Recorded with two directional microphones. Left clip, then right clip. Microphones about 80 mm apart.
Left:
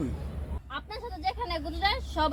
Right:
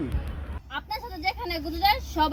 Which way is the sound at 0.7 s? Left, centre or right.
Left.